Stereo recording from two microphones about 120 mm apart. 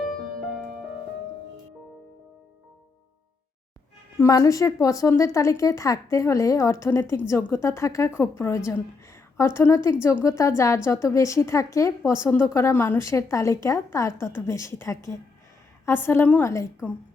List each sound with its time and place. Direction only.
4.2 s speech: 30° left (ahead or behind)